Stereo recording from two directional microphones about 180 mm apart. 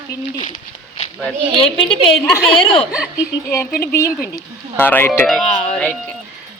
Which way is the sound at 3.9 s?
15° left (ahead or behind).